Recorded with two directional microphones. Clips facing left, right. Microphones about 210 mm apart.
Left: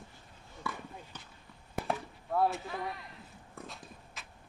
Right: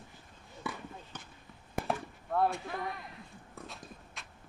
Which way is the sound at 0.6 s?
20° right (ahead or behind).